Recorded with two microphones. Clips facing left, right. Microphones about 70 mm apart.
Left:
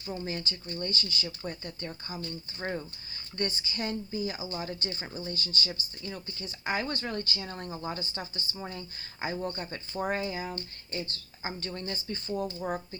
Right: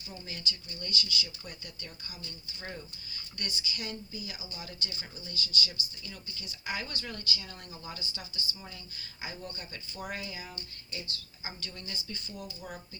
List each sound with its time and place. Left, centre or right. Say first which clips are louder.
0.0 s speech: left 6 dB; left